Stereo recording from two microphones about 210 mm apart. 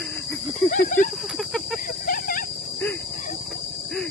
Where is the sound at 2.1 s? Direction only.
40° left (ahead or behind).